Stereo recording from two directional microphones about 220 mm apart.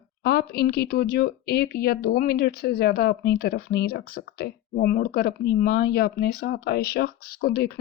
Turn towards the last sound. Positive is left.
turn(degrees=45)  # may be behind; listen again after turning